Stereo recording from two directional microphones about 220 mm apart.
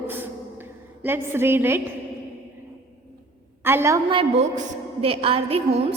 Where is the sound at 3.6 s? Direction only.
10° right (ahead or behind).